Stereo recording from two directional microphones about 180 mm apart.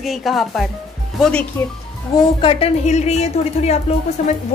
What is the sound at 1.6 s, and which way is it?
Speech, 15° left (ahead or behind).